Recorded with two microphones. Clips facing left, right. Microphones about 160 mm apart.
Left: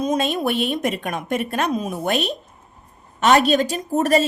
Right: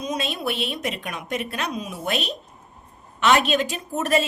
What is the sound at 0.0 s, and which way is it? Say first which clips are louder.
A woman's voice: left 6 dB; 50° left (ahead or behind).